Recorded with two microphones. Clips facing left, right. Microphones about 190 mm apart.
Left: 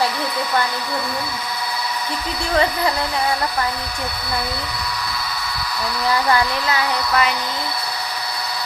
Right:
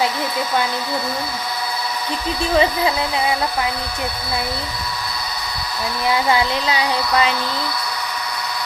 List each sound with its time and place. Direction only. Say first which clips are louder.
2.6 s speech: right 1 dB; 10° right (ahead or behind)
6.1 s speech: right 1 dB; 20° right (ahead or behind)